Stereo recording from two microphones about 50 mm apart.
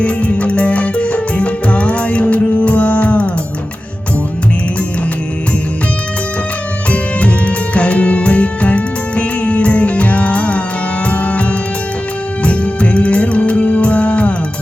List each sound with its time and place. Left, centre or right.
0.0 s music: left
6.9 s music: left